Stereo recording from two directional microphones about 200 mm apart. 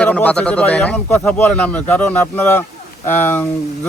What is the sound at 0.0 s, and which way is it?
Speech, 5° left (ahead or behind).